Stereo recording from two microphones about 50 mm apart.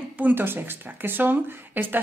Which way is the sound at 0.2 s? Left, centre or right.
Right.